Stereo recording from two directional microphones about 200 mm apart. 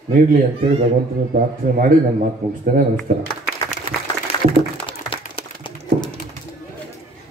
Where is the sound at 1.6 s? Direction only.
45° right (ahead or behind).